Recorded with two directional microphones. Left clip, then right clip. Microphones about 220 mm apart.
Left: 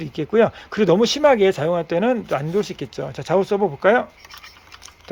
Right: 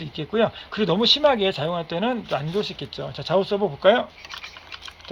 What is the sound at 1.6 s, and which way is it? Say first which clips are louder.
Speech: left 6 dB; 35° left (ahead or behind).